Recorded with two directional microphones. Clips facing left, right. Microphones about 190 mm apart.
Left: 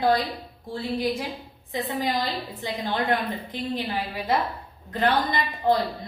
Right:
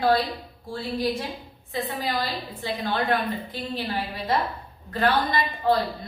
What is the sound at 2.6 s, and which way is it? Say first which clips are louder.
A woman's voice: even; 20° left (ahead or behind).